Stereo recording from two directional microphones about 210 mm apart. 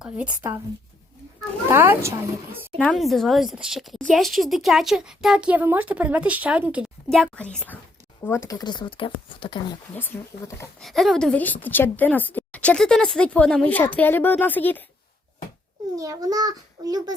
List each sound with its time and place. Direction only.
0.0 s a child's voice: 5° right (ahead or behind)
1.7 s a child's voice: 10° right (ahead or behind)
2.7 s a woman's voice: centre (ahead or behind); by 9.6 s 25° left (ahead or behind)
9.9 s speech: 10° left (ahead or behind)
10.8 s speech: centre (ahead or behind)
16.0 s a child's voice: 15° right (ahead or behind)